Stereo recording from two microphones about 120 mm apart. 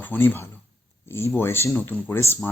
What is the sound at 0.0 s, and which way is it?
Speech, 15° left (ahead or behind).